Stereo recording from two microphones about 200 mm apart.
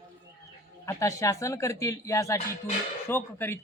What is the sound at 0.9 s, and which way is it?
A woman's voice, 15° left (ahead or behind).